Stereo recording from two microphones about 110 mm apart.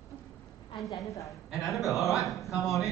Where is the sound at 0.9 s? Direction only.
30° left (ahead or behind).